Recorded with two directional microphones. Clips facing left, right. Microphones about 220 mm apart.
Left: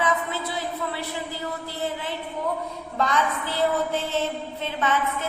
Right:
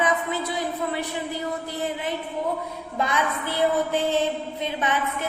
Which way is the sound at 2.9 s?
10° right (ahead or behind).